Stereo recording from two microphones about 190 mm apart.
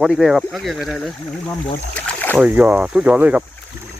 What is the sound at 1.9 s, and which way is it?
Boat, 10° left (ahead or behind).